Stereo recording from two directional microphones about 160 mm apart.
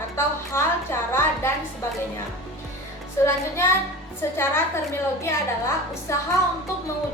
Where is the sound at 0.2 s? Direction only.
15° left (ahead or behind).